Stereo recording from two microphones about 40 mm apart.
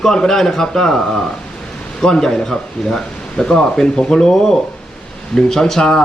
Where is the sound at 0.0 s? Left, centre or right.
Centre.